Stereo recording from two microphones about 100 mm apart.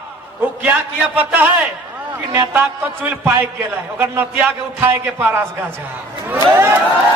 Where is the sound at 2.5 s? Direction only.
20° right (ahead or behind).